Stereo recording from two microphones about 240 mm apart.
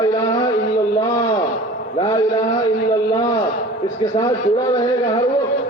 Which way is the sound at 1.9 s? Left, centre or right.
Centre.